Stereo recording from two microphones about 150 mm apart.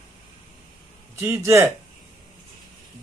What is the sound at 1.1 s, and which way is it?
Speech, 15° right (ahead or behind).